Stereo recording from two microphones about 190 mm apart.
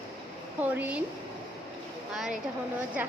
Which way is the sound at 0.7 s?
10° right (ahead or behind).